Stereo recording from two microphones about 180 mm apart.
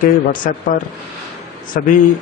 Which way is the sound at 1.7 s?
50° left (ahead or behind).